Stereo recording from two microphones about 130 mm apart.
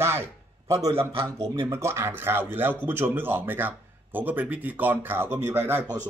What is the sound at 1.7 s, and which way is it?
Speech, 20° right (ahead or behind).